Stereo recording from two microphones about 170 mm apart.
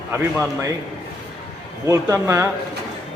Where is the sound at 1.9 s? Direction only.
20° right (ahead or behind).